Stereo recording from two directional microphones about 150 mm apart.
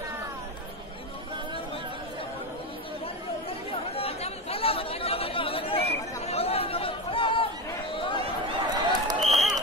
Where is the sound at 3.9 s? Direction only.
40° left (ahead or behind).